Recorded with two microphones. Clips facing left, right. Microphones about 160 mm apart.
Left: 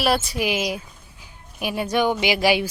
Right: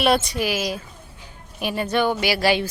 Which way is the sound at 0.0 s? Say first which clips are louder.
Right 2 dB; 5° left (ahead or behind).